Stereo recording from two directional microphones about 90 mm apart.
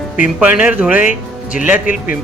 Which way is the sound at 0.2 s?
10° right (ahead or behind).